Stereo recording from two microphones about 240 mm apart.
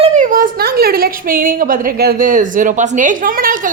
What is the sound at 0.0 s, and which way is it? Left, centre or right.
A woman's voice, right.